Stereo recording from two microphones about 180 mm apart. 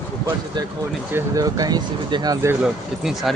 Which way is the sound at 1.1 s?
20° right (ahead or behind).